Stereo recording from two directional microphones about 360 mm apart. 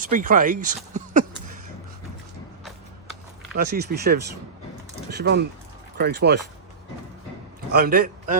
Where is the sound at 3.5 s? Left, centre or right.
Right.